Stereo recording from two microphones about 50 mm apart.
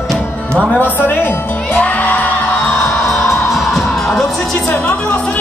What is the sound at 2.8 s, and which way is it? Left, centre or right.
Music, left.